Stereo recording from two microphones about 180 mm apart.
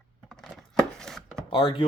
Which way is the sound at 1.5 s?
30° left (ahead or behind).